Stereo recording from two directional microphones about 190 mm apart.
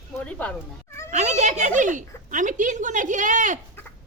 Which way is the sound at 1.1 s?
35° right (ahead or behind).